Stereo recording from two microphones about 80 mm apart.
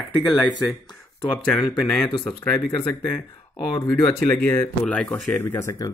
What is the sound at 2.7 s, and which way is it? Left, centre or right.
Speech, left.